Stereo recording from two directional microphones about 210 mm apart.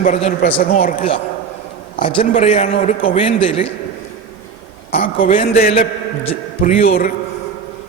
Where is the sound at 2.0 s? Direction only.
25° left (ahead or behind).